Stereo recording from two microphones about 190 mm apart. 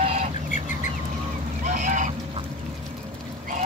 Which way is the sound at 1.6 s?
40° right (ahead or behind).